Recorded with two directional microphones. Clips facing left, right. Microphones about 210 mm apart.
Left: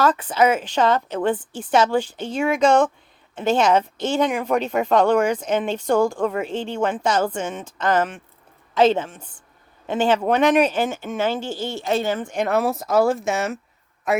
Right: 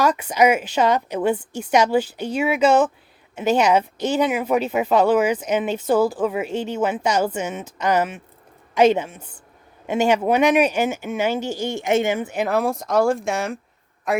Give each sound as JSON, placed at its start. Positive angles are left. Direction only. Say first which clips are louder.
{"t": 0.0, "sound": "a man's voice", "louder": "right 1 dB", "side_deg": -10}